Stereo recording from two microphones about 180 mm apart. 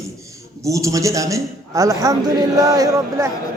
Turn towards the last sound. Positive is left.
turn(degrees=-15)  # may be behind; listen again after turning